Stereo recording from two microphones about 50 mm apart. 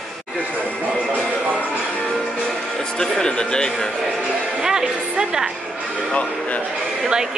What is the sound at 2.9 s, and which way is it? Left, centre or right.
Speech, centre.